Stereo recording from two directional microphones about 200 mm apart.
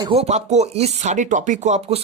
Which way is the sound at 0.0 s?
30° right (ahead or behind).